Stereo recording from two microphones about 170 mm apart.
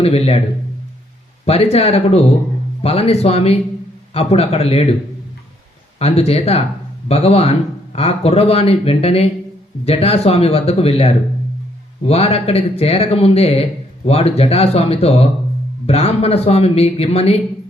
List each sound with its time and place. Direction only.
0.0 s speech: 35° left (ahead or behind)
1.5 s speech: 40° left (ahead or behind)
6.0 s speech: 35° left (ahead or behind)